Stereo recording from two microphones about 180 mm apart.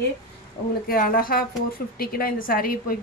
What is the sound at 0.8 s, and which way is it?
A woman's voice, 50° left (ahead or behind).